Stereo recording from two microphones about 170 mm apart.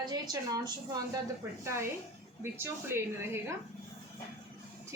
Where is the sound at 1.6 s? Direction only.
15° right (ahead or behind).